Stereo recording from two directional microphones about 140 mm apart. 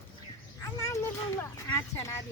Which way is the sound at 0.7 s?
20° left (ahead or behind).